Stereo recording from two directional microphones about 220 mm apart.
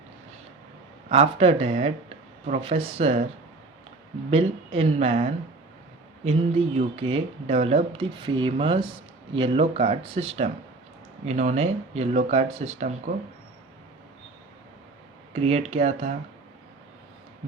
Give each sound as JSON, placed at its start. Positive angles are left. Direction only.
{"t": 1.1, "sound": "speech", "side_deg": -25}
{"t": 4.3, "sound": "speech", "side_deg": -25}
{"t": 6.7, "sound": "speech", "side_deg": -25}
{"t": 15.3, "sound": "speech", "side_deg": -30}